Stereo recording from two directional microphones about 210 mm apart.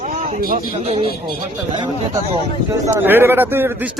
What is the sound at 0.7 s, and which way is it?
Speech, 30° right (ahead or behind).